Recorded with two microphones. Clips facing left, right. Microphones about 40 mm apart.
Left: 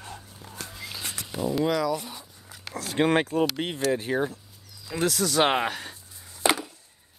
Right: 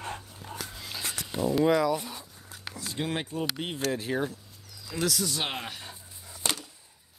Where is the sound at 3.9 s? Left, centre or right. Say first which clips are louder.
Left 4 dB; centre.